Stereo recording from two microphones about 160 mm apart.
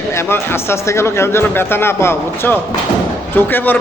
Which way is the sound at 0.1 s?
15° left (ahead or behind).